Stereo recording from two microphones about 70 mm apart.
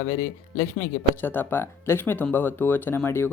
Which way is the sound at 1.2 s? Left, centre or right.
Left.